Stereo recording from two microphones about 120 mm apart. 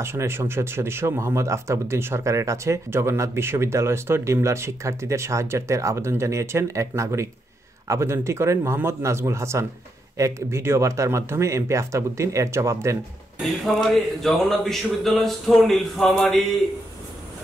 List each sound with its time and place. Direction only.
0.0 s speech: 20° right (ahead or behind)
13.4 s speech: centre (ahead or behind)